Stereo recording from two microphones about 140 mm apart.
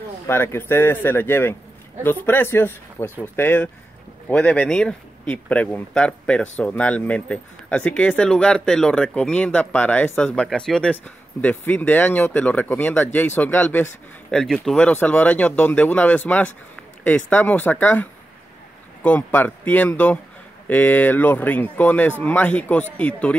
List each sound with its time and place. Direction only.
0.3 s speech: 15° left (ahead or behind)
14.3 s speech: 5° left (ahead or behind)
19.0 s speech: 10° left (ahead or behind)